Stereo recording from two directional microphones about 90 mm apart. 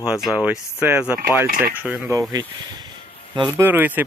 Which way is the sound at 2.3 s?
50° right (ahead or behind).